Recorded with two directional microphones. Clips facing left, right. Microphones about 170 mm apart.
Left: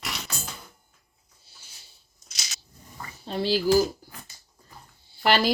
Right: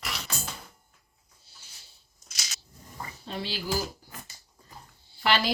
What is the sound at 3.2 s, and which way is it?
Speech, 35° left (ahead or behind).